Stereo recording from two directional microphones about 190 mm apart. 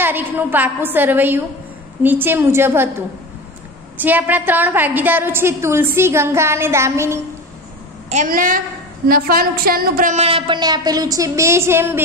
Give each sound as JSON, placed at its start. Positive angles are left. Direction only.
{"t": 0.0, "sound": "a woman's voice", "side_deg": -10}
{"t": 4.0, "sound": "a woman's voice", "side_deg": -10}
{"t": 8.1, "sound": "a woman's voice", "side_deg": -45}